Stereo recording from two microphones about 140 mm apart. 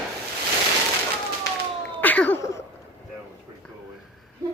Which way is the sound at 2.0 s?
10° left (ahead or behind).